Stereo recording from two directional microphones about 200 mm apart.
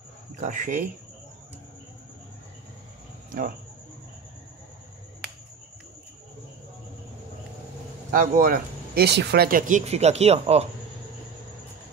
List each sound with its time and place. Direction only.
0.4 s speech: 40° right (ahead or behind)
3.3 s a sound: 45° right (ahead or behind)
8.1 s speech: 45° right (ahead or behind)